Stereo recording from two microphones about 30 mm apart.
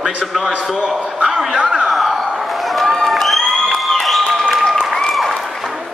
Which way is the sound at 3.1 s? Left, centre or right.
Centre.